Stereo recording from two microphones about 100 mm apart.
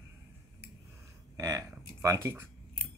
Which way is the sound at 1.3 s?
35° right (ahead or behind).